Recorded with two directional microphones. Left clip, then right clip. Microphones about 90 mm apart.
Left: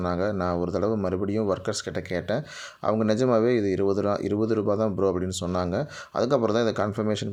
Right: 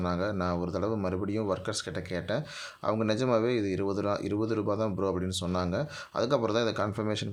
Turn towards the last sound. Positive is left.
turn(degrees=40)  # may be behind; listen again after turning